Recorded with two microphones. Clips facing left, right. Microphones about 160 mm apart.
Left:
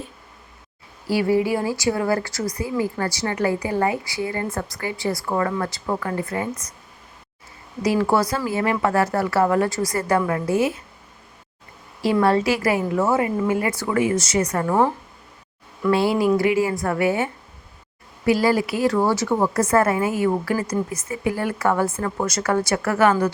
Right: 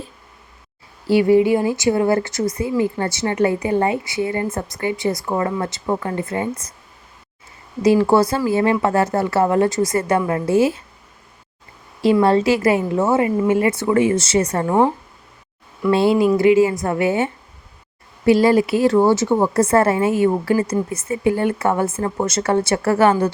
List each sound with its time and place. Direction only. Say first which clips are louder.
1.0 s a woman's voice: right 6 dB; 25° right (ahead or behind)
7.8 s a woman's voice: right 5 dB; 25° right (ahead or behind)
12.2 s a woman's voice: right 1 dB; 25° right (ahead or behind)
15.9 s a woman's voice: right 3 dB; 25° right (ahead or behind)
18.3 s a woman's voice: right 5 dB; 25° right (ahead or behind)